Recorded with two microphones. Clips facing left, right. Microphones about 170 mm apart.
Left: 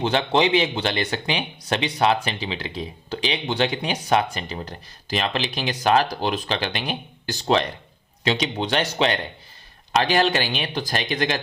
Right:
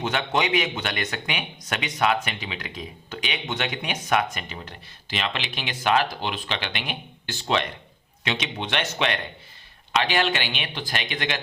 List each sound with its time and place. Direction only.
0.0 s speech: 30° left (ahead or behind)